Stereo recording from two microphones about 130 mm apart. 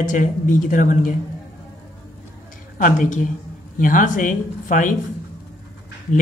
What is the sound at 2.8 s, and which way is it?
Speech, 80° left.